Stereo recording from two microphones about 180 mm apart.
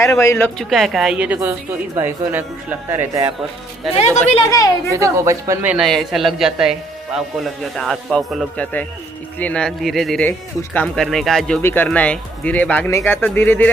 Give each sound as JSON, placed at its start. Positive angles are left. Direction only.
{"t": 0.0, "sound": "speech", "side_deg": 15}
{"t": 0.6, "sound": "a man's voice", "side_deg": 0}
{"t": 3.9, "sound": "a woman's voice", "side_deg": 35}
{"t": 4.5, "sound": "a woman's voice", "side_deg": 20}
{"t": 4.9, "sound": "a man's voice", "side_deg": -15}